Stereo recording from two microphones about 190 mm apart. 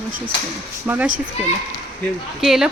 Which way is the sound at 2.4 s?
Centre (ahead or behind).